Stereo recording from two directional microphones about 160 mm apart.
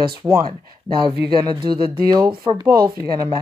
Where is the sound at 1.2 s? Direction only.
25° right (ahead or behind).